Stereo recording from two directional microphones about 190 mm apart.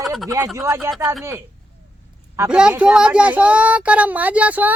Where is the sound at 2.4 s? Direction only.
5° right (ahead or behind).